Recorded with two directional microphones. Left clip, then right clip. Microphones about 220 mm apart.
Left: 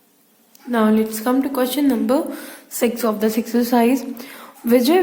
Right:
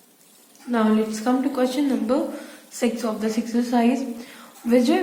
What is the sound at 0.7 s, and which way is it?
A woman's voice, 50° left (ahead or behind).